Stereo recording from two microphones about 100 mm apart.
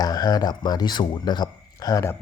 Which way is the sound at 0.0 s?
40° left (ahead or behind).